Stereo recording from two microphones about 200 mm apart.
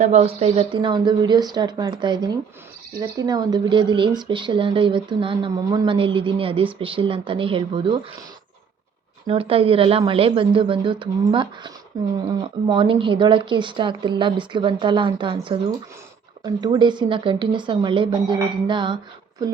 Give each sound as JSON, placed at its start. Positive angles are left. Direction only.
{"t": 0.0, "sound": "speech", "side_deg": -35}
{"t": 9.2, "sound": "speech", "side_deg": -25}